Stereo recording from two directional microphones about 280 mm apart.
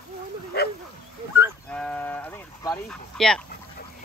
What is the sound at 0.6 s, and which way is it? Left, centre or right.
Bow-wow, left.